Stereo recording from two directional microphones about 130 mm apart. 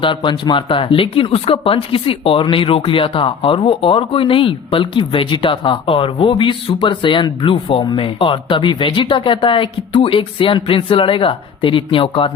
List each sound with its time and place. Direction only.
0.0 s speech: 40° left (ahead or behind)